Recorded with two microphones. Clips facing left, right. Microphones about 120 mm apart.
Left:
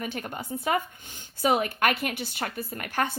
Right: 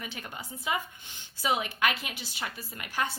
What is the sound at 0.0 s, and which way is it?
A woman's voice, 50° left (ahead or behind).